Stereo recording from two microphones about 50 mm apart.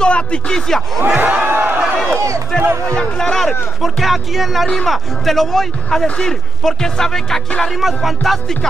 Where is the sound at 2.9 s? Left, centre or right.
Centre.